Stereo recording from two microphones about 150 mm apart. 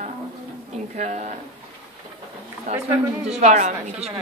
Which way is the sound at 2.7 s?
45° right (ahead or behind).